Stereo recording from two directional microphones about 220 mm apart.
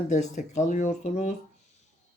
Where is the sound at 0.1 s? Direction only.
35° left (ahead or behind).